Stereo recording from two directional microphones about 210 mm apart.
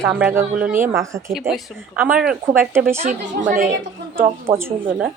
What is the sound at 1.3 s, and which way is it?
Speech, centre (ahead or behind).